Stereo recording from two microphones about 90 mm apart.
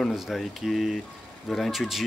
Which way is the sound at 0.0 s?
Centre (ahead or behind).